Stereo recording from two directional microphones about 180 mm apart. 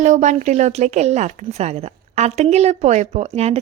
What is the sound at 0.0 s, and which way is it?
A woman's voice, 45° right (ahead or behind).